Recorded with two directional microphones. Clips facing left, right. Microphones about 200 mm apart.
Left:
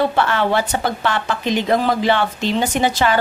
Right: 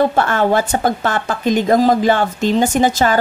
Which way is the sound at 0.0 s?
45° right (ahead or behind).